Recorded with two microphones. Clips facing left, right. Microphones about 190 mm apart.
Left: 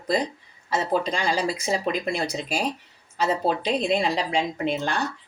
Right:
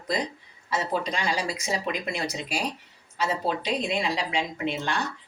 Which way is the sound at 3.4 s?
35° left (ahead or behind).